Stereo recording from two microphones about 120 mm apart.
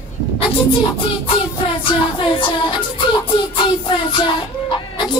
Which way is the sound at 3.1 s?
45° left (ahead or behind).